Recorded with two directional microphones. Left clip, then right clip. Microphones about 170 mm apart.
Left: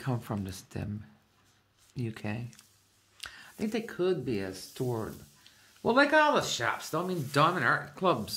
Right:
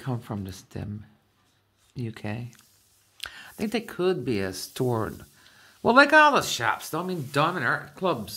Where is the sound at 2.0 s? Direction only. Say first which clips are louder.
Right 3 dB; 15° right (ahead or behind).